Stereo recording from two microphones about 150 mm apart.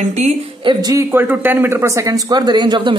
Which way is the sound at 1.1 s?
15° right (ahead or behind).